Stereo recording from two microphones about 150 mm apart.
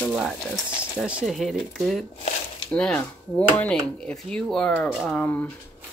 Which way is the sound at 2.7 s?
5° left (ahead or behind).